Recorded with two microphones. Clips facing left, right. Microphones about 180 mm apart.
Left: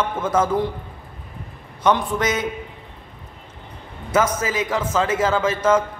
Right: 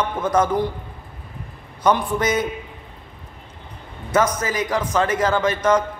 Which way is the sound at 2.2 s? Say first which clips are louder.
Right 2 dB; centre (ahead or behind).